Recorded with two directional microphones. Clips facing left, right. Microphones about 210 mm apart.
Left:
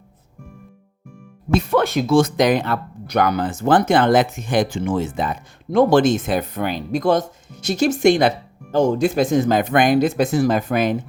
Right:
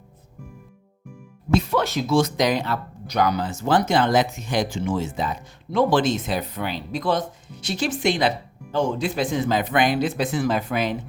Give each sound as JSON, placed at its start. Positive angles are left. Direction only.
{"t": 1.5, "sound": "speech", "side_deg": 55}